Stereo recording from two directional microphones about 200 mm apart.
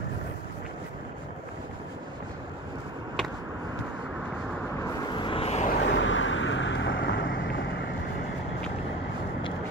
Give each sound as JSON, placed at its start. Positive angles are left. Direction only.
{"t": 5.1, "sound": "vehicle", "side_deg": 25}
{"t": 5.7, "sound": "vehicle", "side_deg": 65}